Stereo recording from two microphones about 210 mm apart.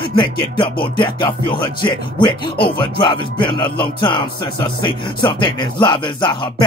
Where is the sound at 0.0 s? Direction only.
20° left (ahead or behind).